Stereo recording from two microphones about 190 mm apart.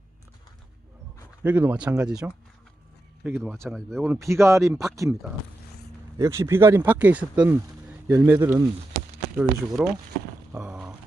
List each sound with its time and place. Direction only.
1.5 s speech: 10° right (ahead or behind)
6.1 s speech: 15° right (ahead or behind)
10.5 s a sound: 10° right (ahead or behind)